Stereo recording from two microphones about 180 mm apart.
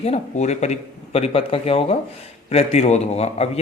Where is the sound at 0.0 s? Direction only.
40° left (ahead or behind).